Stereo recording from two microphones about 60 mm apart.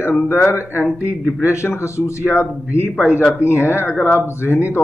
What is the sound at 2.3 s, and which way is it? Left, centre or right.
A man's voice, left.